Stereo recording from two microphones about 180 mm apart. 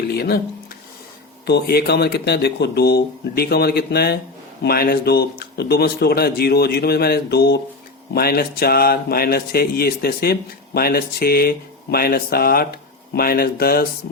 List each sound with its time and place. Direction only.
0.1 s speech: 60° left (ahead or behind)
1.5 s speech: 65° left (ahead or behind)